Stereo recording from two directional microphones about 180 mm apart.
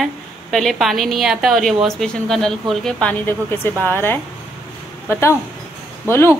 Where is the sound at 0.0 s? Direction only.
Centre (ahead or behind).